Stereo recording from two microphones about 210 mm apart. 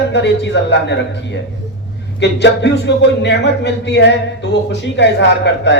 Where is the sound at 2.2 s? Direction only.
55° left (ahead or behind).